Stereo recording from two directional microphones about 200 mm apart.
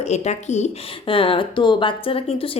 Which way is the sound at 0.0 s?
35° left (ahead or behind).